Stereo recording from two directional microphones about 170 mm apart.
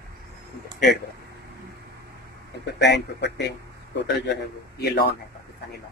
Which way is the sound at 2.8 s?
85° left.